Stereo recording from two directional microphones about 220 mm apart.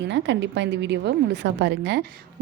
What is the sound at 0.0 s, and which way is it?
A woman's voice, 55° right (ahead or behind).